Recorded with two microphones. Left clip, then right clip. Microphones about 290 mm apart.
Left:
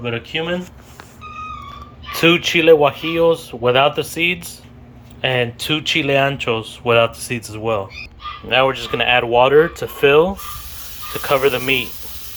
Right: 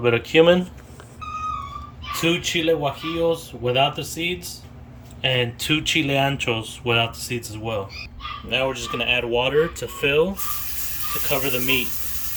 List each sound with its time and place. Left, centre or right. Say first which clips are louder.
0.0 s speech: right 7 dB; centre
2.2 s speech: left 9 dB; centre